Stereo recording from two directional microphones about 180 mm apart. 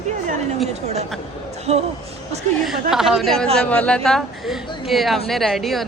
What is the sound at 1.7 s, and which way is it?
Speech, 35° right (ahead or behind).